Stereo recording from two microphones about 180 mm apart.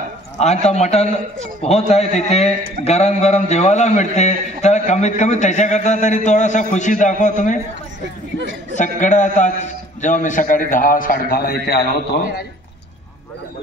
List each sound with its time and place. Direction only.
0.4 s a man's voice: 40° left (ahead or behind)
8.7 s a man's voice: 45° left (ahead or behind); by 12.4 s 60° left (ahead or behind)